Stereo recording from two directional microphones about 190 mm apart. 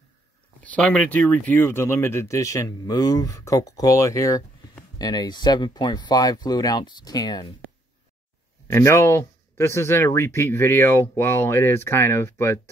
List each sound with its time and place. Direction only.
0.7 s speech: 5° left (ahead or behind)
8.6 s speech: 15° left (ahead or behind)